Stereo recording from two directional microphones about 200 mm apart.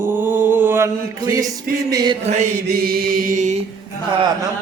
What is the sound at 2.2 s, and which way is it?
Mantra, 35° right (ahead or behind).